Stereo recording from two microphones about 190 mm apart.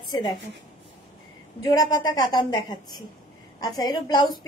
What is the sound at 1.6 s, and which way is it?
A woman's voice, 20° left (ahead or behind).